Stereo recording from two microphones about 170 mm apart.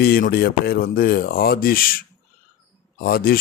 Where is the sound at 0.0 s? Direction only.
65° left (ahead or behind).